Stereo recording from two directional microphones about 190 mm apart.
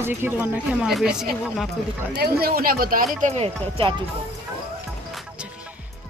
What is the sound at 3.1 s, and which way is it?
Speech, 35° right (ahead or behind).